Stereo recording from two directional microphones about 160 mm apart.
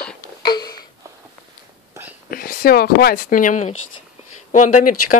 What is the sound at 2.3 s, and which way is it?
Speech, 65° left (ahead or behind).